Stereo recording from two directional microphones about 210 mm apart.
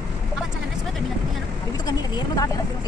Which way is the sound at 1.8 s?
20° left (ahead or behind).